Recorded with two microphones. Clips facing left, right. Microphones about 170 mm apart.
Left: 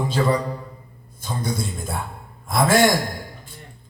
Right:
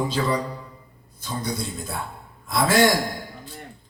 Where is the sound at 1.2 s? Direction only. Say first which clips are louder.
Left 2 dB; 50° left (ahead or behind).